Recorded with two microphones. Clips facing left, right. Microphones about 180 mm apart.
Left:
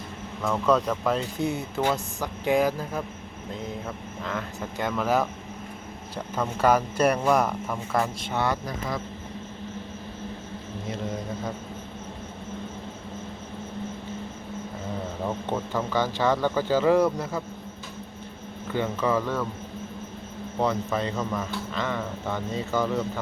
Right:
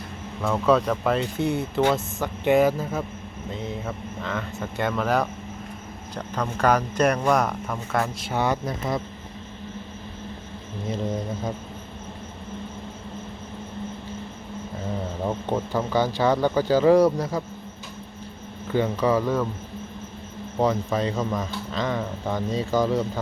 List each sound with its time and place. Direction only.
0.4 s speech: 5° right (ahead or behind)
8.3 s speech: 15° right (ahead or behind)
15.4 s speech: 10° right (ahead or behind)
18.7 s speech: 15° right (ahead or behind)
20.6 s speech: 15° right (ahead or behind)